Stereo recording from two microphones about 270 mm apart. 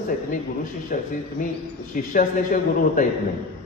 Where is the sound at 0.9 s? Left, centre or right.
Left.